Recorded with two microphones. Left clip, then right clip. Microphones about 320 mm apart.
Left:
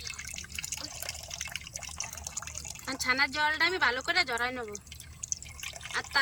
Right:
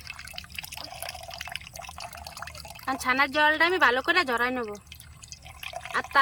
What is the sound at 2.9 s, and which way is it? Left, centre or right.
Speech, centre.